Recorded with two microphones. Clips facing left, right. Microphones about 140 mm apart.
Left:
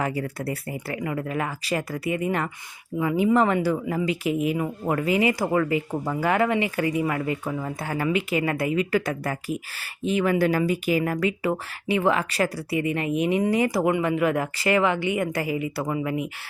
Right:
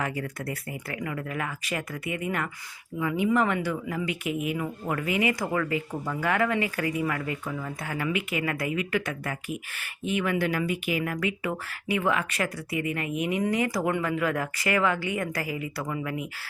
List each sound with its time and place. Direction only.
0.0 s speech: 30° left (ahead or behind)
7.4 s speech: 35° left (ahead or behind)